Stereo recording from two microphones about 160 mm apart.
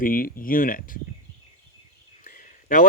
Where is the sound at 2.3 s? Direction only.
55° left (ahead or behind).